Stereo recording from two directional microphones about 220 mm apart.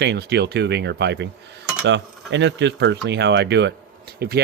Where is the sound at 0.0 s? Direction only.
50° right (ahead or behind).